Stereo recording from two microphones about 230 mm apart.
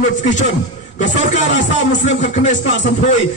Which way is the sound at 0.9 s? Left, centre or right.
Left.